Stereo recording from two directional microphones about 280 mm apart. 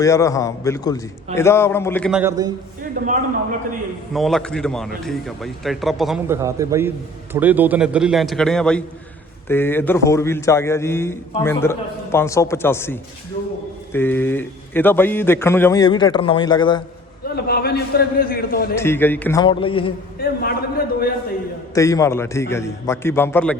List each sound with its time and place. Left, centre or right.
0.0 s speech: centre
3.0 s a man's voice: right
4.1 s a man's voice: centre
17.2 s a man's voice: left
18.8 s speech: centre
20.2 s a sound: left
21.8 s speech: centre